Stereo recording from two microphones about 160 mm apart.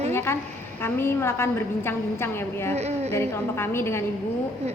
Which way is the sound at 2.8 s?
40° right (ahead or behind).